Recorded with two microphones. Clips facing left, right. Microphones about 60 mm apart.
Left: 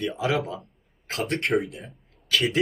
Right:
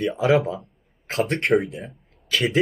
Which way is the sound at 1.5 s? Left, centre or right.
Centre.